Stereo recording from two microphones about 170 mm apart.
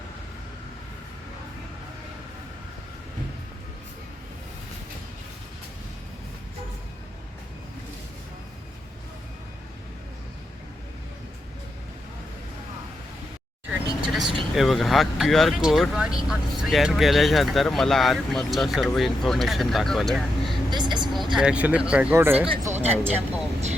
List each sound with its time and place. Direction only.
14.1 s vehicle: centre (ahead or behind)
14.5 s speech: centre (ahead or behind)
20.7 s vehicle: 25° right (ahead or behind)
21.3 s speech: 5° right (ahead or behind)
22.6 s a sound: 40° right (ahead or behind)
22.9 s speech: 10° right (ahead or behind)